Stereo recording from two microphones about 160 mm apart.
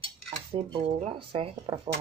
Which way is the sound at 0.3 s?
35° right (ahead or behind).